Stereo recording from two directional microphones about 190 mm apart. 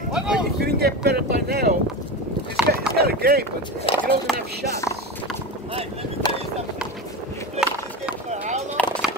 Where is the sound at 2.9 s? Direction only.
55° right (ahead or behind).